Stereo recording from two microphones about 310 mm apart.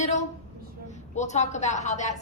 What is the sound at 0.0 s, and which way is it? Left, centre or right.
A woman's voice, left.